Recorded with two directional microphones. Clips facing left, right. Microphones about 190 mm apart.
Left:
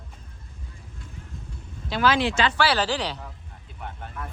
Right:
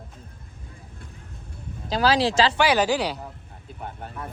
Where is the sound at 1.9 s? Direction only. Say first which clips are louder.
Right 2 dB; 35° right (ahead or behind).